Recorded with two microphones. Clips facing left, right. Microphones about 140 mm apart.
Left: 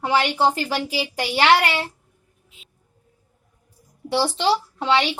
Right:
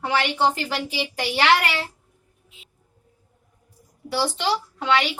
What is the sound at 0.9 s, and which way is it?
Speech, 30° left (ahead or behind).